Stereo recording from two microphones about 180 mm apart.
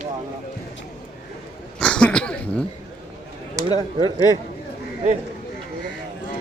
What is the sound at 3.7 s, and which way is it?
Speech, 25° right (ahead or behind).